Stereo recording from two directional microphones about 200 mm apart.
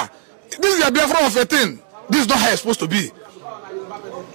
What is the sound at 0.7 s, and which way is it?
Speech, centre (ahead or behind).